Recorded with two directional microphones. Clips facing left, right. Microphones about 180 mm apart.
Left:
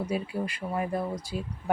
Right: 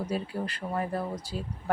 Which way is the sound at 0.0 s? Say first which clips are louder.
Left 1 dB; 10° left (ahead or behind).